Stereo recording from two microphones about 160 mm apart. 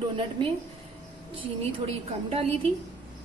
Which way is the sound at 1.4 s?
35° right (ahead or behind).